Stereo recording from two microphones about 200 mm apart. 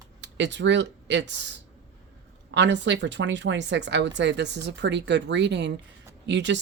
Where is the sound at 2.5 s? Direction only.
60° right (ahead or behind).